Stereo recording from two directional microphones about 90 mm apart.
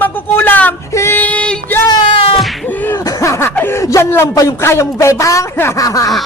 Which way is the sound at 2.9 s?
40° left (ahead or behind).